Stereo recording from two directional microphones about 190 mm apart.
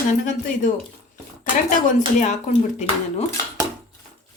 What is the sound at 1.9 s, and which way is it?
Speech, 40° left (ahead or behind).